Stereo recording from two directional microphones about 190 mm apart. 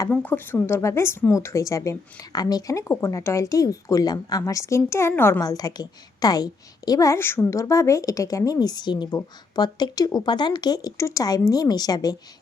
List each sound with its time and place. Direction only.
0.0 s speech: 10° left (ahead or behind)